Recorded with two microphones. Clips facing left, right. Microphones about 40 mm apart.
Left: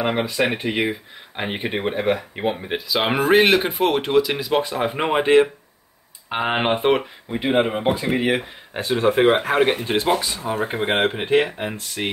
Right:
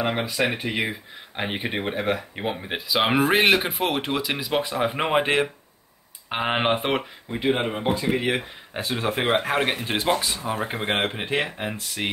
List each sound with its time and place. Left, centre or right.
0.0 s speech: centre